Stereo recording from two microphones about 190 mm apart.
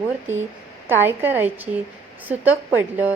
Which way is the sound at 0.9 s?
10° right (ahead or behind).